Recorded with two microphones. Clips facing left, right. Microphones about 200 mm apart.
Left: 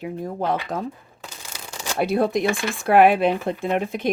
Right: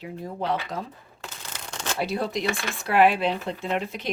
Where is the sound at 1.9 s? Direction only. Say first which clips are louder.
Left 7 dB; 50° left (ahead or behind).